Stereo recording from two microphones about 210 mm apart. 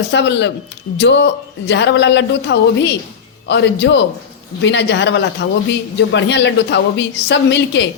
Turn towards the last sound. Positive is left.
turn(degrees=60)  # may be behind; listen again after turning